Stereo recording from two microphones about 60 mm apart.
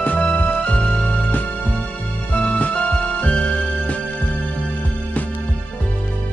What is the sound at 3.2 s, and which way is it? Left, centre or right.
Music, left.